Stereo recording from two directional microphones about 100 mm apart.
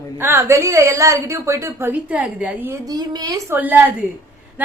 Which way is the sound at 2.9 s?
40° right (ahead or behind).